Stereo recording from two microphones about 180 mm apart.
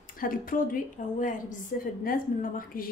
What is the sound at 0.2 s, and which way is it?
A woman's voice, 50° left (ahead or behind).